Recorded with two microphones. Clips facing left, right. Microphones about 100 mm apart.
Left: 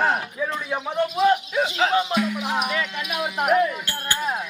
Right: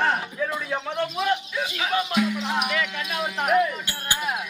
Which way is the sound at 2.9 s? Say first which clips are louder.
Left 1 dB; 15° left (ahead or behind).